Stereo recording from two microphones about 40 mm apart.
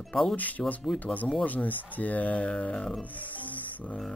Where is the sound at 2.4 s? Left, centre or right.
Left.